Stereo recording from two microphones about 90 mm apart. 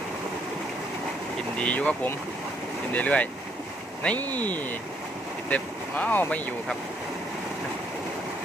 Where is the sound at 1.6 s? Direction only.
15° left (ahead or behind).